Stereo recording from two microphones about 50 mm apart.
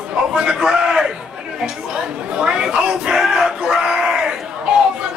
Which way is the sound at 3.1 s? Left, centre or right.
Centre.